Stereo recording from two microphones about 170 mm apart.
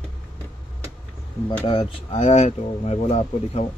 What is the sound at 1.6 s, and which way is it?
Speech, 30° left (ahead or behind).